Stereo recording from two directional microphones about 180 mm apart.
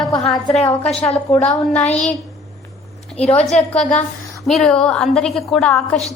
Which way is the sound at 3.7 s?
5° left (ahead or behind).